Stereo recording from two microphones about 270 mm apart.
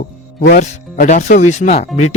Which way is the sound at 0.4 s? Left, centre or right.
Left.